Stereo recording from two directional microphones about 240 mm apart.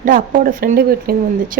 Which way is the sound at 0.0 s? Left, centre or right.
Right.